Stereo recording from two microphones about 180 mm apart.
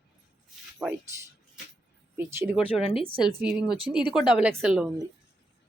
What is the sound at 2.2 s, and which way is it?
A woman's voice, 15° right (ahead or behind).